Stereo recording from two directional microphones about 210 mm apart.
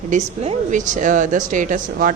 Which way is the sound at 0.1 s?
35° right (ahead or behind).